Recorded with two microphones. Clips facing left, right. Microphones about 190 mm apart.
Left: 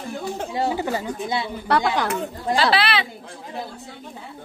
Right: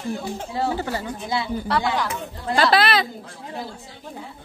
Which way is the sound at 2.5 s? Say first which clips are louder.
Right 2 dB; 45° right (ahead or behind).